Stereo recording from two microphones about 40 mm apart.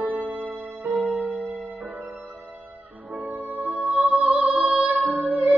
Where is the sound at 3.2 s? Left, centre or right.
Right.